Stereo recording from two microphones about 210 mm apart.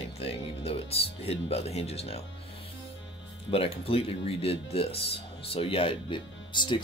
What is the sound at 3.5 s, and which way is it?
Speech, 25° left (ahead or behind).